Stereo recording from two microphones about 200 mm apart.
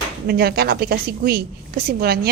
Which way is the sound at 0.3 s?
50° right (ahead or behind).